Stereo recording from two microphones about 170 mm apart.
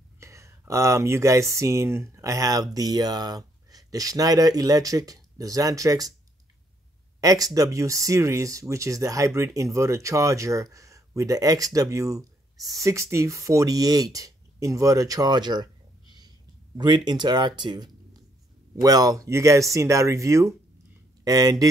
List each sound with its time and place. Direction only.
0.2 s a sound: 15° right (ahead or behind)
1.5 s speech: 20° right (ahead or behind)
7.2 s speech: 20° right (ahead or behind)
12.5 s speech: centre (ahead or behind)
12.8 s speech: 15° right (ahead or behind)